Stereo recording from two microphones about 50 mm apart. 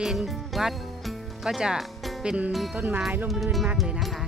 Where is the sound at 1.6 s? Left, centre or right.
Centre.